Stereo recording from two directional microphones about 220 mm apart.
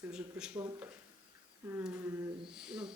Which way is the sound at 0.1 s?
5° right (ahead or behind).